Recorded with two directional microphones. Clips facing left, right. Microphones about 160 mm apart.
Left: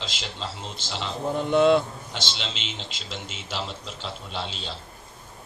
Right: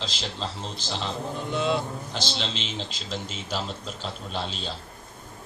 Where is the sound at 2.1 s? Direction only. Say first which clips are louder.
Right 2 dB; 40° right (ahead or behind).